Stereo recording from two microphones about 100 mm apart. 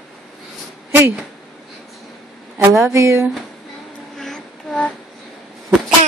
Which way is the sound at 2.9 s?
30° right (ahead or behind).